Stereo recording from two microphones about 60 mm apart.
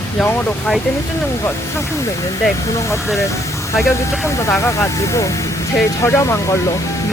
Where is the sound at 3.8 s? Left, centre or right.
Left.